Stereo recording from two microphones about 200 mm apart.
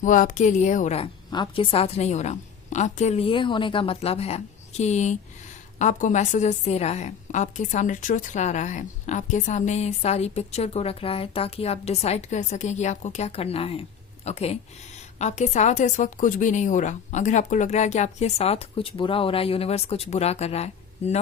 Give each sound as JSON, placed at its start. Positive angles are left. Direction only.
{"t": 0.0, "sound": "a woman's voice", "side_deg": 40}
{"t": 1.3, "sound": "a woman's voice", "side_deg": 25}